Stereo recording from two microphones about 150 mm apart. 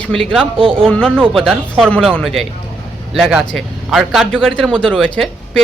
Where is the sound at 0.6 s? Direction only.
35° right (ahead or behind).